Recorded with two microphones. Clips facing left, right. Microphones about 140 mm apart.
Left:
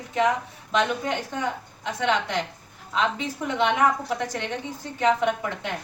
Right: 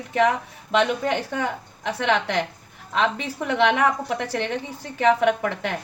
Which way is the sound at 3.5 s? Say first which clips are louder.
Right 3 dB; 65° right (ahead or behind).